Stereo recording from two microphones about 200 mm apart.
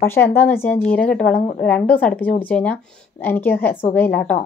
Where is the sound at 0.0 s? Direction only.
10° left (ahead or behind).